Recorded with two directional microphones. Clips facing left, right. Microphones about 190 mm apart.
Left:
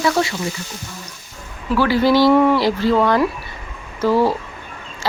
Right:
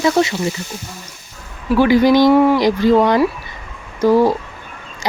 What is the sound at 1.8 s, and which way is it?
Speech, 15° right (ahead or behind).